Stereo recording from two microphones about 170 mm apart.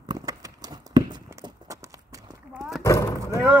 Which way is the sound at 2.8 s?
20° left (ahead or behind).